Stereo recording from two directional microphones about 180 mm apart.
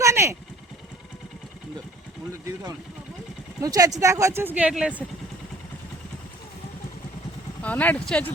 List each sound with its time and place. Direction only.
0.0 s vehicle: 15° right (ahead or behind)
3.6 s speech: 20° right (ahead or behind)
7.6 s speech: 10° left (ahead or behind)